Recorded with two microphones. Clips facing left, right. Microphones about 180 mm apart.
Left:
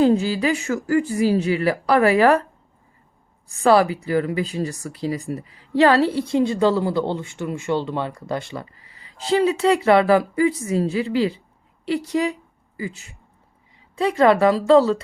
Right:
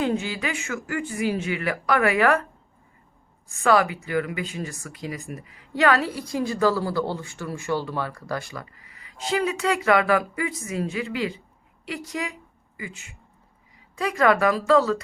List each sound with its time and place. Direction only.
0.0 s speech: 35° left (ahead or behind)
3.6 s a woman's voice: 30° left (ahead or behind)